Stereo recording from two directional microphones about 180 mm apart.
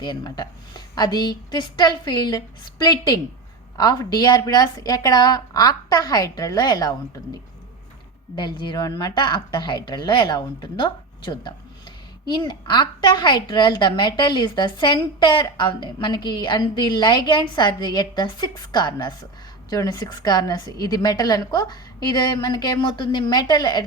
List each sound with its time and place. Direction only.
0.0 s a woman's voice: 25° left (ahead or behind)
8.4 s a woman's voice: 25° left (ahead or behind)